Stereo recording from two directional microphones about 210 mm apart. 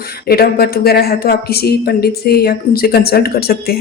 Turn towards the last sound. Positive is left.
turn(degrees=45)  # may be behind; listen again after turning